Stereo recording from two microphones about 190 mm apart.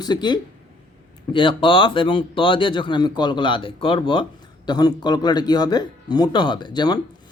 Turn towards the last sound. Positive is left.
turn(degrees=20)  # may be behind; listen again after turning